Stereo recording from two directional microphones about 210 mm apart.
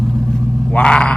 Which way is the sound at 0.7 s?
5° left (ahead or behind).